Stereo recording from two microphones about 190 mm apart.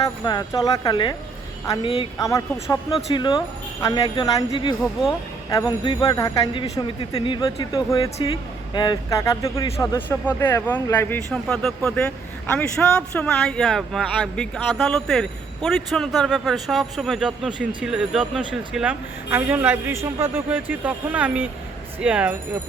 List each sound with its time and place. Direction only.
0.0 s speech: 20° left (ahead or behind); by 22.4 s 5° right (ahead or behind)